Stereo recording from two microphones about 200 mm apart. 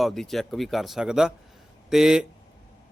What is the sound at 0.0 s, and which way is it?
Speech, centre (ahead or behind).